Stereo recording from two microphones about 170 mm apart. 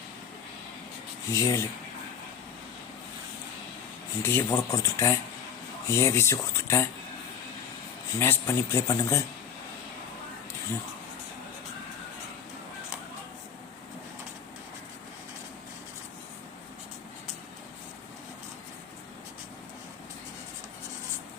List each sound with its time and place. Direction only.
1.3 s speech: 20° left (ahead or behind)
4.2 s speech: 15° left (ahead or behind)
8.2 s speech: 15° left (ahead or behind)